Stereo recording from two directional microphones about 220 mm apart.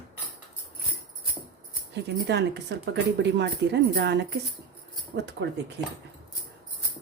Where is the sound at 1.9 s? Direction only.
50° right (ahead or behind).